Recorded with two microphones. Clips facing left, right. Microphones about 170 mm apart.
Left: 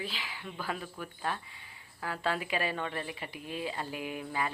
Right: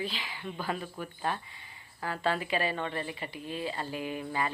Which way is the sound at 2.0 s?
5° left (ahead or behind).